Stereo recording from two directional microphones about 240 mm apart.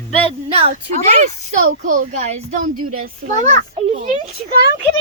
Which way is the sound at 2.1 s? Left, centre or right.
Right.